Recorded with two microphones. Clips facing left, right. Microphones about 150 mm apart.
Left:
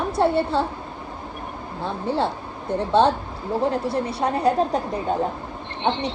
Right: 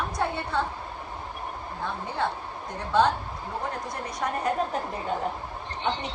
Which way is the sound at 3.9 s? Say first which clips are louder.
Left 7 dB; 30° left (ahead or behind).